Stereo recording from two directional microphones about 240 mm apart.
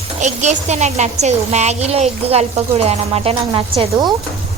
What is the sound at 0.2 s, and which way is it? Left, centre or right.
A woman's voice, right.